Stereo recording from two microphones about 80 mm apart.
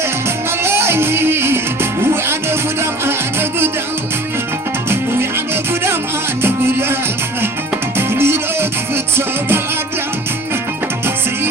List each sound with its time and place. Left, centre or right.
0.6 s music: right
6.4 s music: right
7.9 s music: right